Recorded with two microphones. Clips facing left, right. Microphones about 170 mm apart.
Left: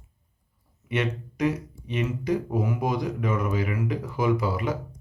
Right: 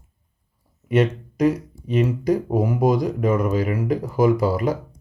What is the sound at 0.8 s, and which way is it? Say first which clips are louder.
Speech: right 8 dB; 40° right (ahead or behind).